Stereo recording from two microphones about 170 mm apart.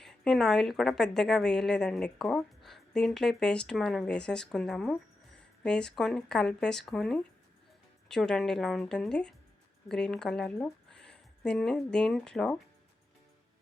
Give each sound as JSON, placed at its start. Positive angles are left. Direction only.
{"t": 0.0, "sound": "a woman's voice", "side_deg": 0}